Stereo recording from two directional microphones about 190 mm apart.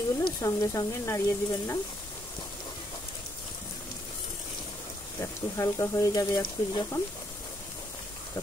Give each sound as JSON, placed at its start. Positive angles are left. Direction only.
{"t": 0.2, "sound": "speech", "side_deg": 20}
{"t": 5.2, "sound": "speech", "side_deg": 15}